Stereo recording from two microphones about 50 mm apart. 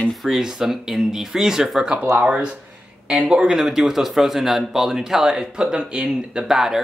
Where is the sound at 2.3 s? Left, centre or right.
Centre.